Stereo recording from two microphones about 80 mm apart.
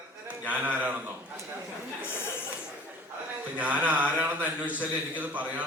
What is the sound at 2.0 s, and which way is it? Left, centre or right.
Chuckle, left.